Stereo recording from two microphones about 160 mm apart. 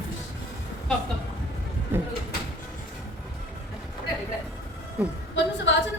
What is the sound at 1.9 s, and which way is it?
Speech, 15° right (ahead or behind).